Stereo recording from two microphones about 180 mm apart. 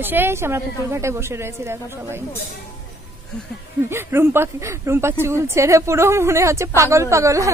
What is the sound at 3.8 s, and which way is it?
Speech, 15° right (ahead or behind).